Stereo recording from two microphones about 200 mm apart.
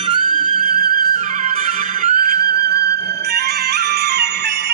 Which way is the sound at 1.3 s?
35° right (ahead or behind).